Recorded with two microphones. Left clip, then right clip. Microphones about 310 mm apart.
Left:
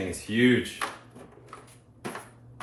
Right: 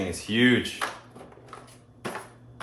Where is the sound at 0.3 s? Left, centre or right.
Centre.